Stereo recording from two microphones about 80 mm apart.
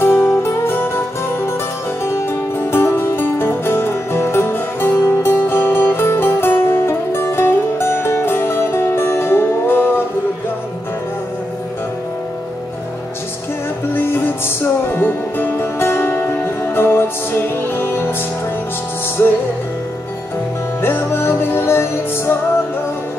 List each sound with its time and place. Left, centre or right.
0.0 s music: left
13.9 s music: left
19.2 s music: left
20.8 s music: left